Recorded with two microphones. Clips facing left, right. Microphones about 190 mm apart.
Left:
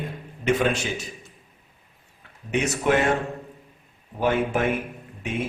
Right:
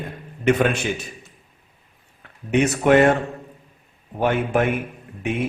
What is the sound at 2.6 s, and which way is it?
Speech, 55° right (ahead or behind).